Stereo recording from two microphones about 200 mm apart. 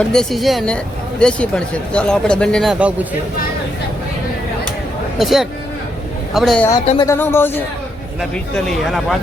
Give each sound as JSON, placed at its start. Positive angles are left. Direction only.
{"t": 0.0, "sound": "speech", "side_deg": 5}
{"t": 5.1, "sound": "speech", "side_deg": 0}
{"t": 7.0, "sound": "speech", "side_deg": 15}
{"t": 8.2, "sound": "speech", "side_deg": 0}